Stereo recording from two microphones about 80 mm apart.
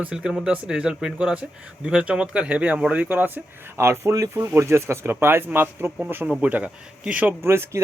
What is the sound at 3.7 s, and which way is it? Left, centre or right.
Speech, right.